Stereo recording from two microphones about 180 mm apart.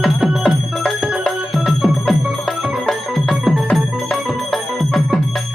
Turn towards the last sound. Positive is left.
turn(degrees=0)  # may be behind; listen again after turning